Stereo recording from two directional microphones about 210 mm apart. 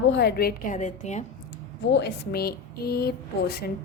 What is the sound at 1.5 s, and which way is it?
Speech, 55° left (ahead or behind).